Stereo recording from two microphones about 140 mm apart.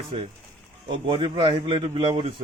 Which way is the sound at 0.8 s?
35° right (ahead or behind).